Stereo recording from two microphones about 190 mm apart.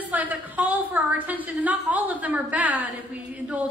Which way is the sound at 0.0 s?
10° right (ahead or behind).